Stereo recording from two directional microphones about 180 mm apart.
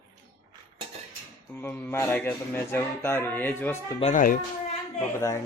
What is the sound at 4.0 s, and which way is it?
Speech, 40° left (ahead or behind).